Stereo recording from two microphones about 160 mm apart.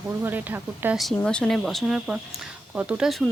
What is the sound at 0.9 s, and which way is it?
Speech, 5° left (ahead or behind).